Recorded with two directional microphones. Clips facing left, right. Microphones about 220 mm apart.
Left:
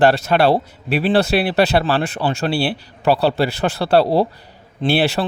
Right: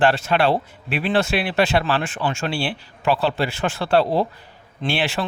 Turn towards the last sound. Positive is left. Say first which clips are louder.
# left 6 dB
turn(degrees=40)  # may be behind; listen again after turning